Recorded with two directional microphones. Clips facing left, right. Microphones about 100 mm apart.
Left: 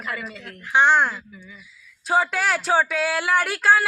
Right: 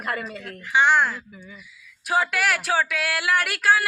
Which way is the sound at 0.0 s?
50° right (ahead or behind).